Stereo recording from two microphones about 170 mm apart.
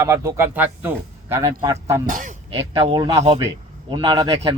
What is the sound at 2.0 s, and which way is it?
Speech, 50° right (ahead or behind).